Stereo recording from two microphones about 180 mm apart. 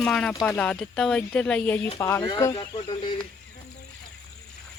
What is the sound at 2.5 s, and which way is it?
Speech, 30° left (ahead or behind).